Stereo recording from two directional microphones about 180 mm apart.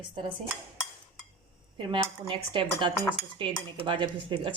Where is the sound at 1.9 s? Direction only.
30° right (ahead or behind).